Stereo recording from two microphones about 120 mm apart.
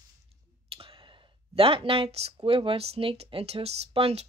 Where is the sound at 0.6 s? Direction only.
50° right (ahead or behind).